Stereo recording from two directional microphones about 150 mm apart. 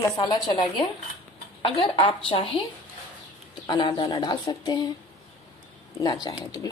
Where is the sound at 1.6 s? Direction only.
35° left (ahead or behind).